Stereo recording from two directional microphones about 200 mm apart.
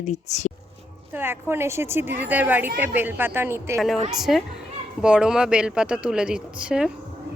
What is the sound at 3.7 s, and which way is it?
A woman's voice, centre (ahead or behind).